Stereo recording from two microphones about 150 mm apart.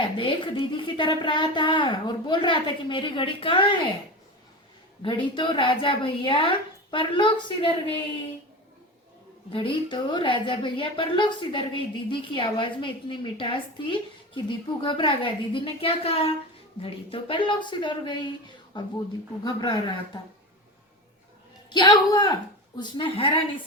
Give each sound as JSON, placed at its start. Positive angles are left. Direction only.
{"t": 0.0, "sound": "a woman's voice", "side_deg": 35}
{"t": 5.0, "sound": "a woman's voice", "side_deg": 35}
{"t": 9.5, "sound": "a woman's voice", "side_deg": 35}
{"t": 21.7, "sound": "a man's voice", "side_deg": 30}